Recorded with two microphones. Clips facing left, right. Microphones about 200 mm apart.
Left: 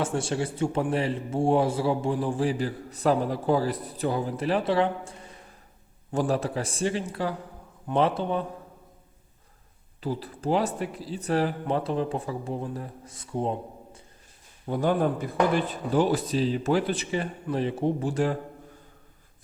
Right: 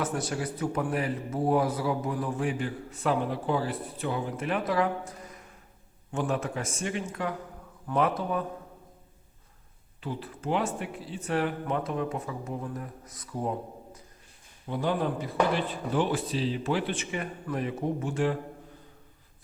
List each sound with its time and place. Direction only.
0.0 s a man's voice: 30° left (ahead or behind)
10.0 s speech: 35° left (ahead or behind)
14.7 s speech: 45° left (ahead or behind)